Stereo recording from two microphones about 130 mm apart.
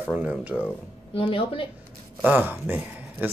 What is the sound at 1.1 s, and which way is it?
Speech, 45° left (ahead or behind).